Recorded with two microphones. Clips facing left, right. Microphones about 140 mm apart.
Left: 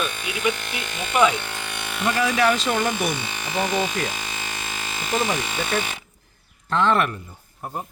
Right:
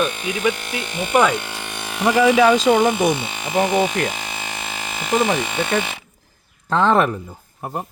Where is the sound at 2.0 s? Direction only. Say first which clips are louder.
Right 7 dB; 90° right.